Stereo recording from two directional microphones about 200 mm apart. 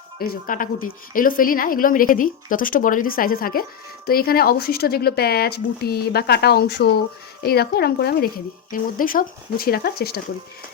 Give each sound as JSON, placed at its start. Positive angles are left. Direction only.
{"t": 0.2, "sound": "speech", "side_deg": 45}